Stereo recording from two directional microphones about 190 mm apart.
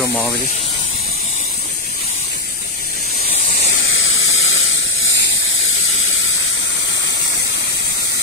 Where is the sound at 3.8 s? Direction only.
90° left.